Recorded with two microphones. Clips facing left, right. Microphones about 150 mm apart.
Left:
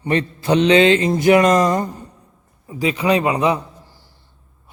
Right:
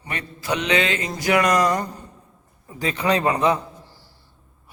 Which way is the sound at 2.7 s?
10° left (ahead or behind).